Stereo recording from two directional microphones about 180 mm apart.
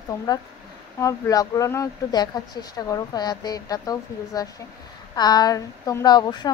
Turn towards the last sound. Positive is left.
turn(degrees=25)  # may be behind; listen again after turning